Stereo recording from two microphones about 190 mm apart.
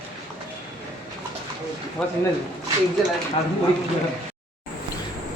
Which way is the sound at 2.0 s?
Centre (ahead or behind).